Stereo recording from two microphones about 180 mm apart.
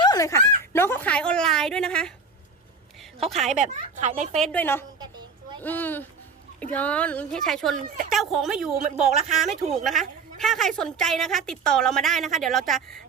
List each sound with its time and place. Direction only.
0.0 s speech: 20° left (ahead or behind); by 2.1 s 5° left (ahead or behind)
3.2 s a woman's voice: centre (ahead or behind)
3.5 s a woman's voice: 45° right (ahead or behind)
4.4 s a woman's voice: 5° left (ahead or behind)